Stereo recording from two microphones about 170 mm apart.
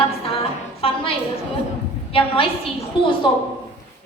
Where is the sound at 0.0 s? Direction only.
35° left (ahead or behind).